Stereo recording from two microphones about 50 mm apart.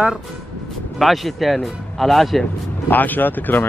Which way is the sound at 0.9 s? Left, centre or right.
Centre.